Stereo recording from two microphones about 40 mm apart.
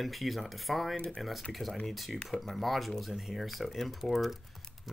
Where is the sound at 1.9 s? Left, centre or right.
Centre.